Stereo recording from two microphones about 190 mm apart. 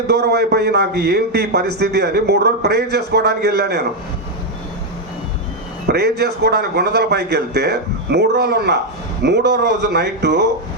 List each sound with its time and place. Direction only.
0.1 s a man's voice: 60° right (ahead or behind)
5.9 s a man's voice: 60° right (ahead or behind)